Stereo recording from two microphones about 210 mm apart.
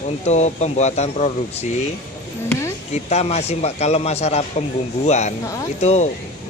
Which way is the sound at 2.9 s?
30° left (ahead or behind).